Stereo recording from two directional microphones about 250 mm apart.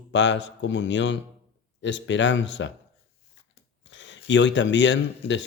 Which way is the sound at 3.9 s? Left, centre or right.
Left.